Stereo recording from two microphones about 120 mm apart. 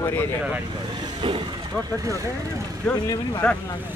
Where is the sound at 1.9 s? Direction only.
25° right (ahead or behind).